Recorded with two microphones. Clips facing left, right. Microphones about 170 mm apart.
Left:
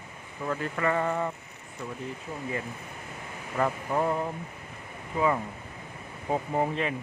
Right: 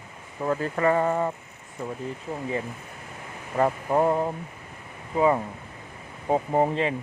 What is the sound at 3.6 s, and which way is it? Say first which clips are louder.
Speech: right 5 dB; 35° right (ahead or behind).